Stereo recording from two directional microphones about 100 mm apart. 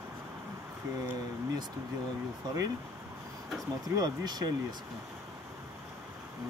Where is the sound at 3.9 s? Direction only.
45° right (ahead or behind).